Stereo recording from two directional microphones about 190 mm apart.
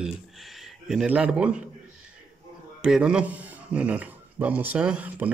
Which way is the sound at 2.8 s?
5° right (ahead or behind).